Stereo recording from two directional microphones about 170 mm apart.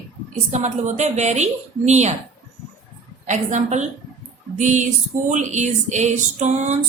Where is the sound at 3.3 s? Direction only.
45° right (ahead or behind).